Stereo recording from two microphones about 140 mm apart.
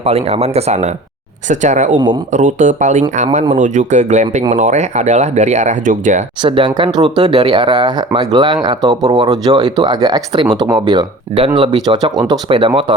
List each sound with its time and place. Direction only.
0.0 s speech: 50° right (ahead or behind)
2.0 s speech: 35° right (ahead or behind)
2.3 s speech: 65° right (ahead or behind)
6.4 s speech: 35° right (ahead or behind)